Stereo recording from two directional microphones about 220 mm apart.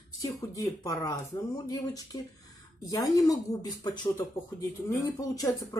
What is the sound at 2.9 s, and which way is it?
Speech, 15° left (ahead or behind).